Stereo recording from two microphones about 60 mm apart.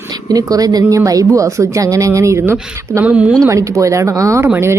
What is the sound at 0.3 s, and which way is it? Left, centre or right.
Speech, right.